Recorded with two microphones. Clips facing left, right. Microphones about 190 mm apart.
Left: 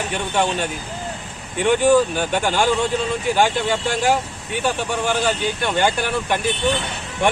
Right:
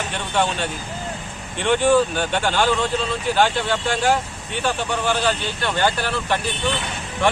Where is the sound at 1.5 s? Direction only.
10° left (ahead or behind).